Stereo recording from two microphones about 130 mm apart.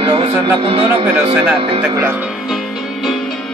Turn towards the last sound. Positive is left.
turn(degrees=0)  # may be behind; listen again after turning